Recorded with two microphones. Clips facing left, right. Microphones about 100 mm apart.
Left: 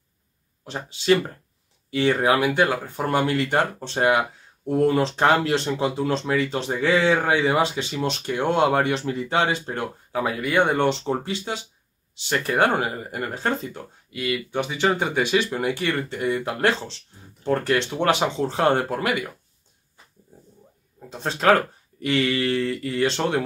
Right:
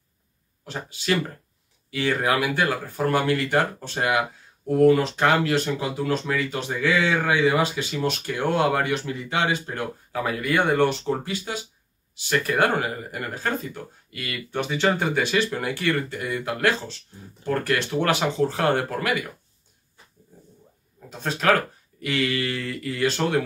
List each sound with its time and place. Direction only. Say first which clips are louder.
0.7 s speech: left 5 dB; 25° left (ahead or behind)
10.2 s speech: left 1 dB; 20° left (ahead or behind)
14.1 s speech: left 4 dB; 15° left (ahead or behind)
21.2 s speech: left 3 dB; 30° left (ahead or behind)